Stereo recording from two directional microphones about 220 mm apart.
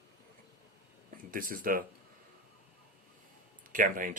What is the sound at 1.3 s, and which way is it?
Speech, 40° right (ahead or behind).